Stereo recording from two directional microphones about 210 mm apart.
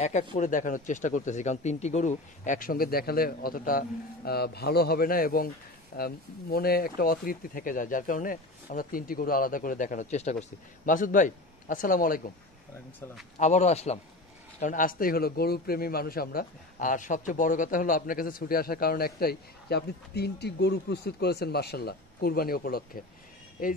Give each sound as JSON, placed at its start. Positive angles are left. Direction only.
{"t": 0.0, "sound": "speech", "side_deg": 35}
{"t": 13.4, "sound": "a man's voice", "side_deg": 35}